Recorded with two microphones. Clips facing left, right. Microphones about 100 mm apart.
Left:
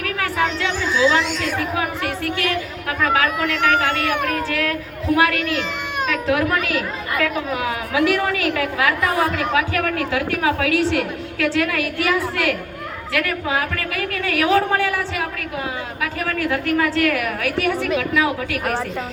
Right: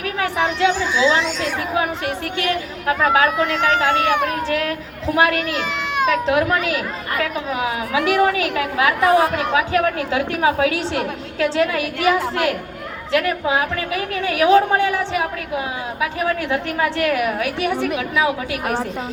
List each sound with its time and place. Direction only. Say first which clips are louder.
0.0 s chatter: right 1 dB; 20° right (ahead or behind)
1.1 s a woman's voice: even; 25° right (ahead or behind)